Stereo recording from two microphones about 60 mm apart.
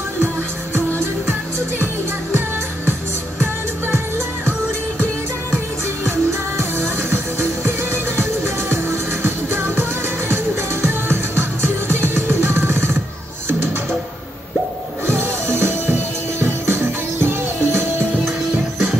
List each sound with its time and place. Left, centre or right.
6.6 s music: right
15.0 s music: right